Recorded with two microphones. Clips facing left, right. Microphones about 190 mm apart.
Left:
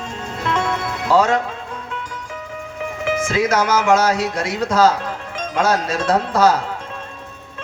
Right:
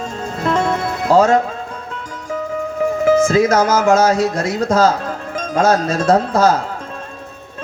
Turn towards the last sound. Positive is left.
turn(degrees=-45)  # may be behind; listen again after turning